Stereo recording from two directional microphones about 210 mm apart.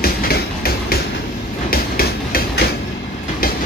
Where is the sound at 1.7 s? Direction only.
45° left (ahead or behind).